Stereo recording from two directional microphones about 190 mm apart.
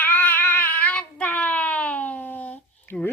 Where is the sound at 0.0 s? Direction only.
10° left (ahead or behind).